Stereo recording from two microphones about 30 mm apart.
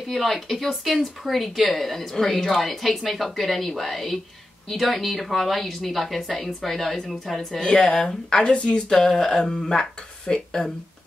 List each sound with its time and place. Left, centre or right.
0.1 s speech: centre
7.6 s speech: centre